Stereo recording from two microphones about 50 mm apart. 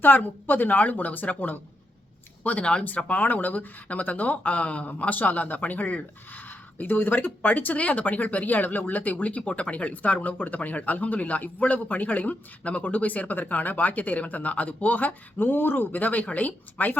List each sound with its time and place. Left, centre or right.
0.0 s speech: left